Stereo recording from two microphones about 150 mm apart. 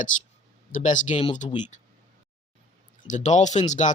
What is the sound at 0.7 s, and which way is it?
Speech, 55° left (ahead or behind).